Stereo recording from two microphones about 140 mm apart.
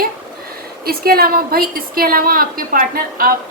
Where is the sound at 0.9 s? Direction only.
90° right.